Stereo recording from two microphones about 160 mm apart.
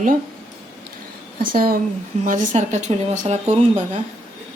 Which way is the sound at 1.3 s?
65° right (ahead or behind).